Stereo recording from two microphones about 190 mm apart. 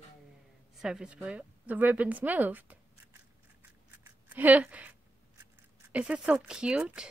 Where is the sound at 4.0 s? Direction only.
10° right (ahead or behind).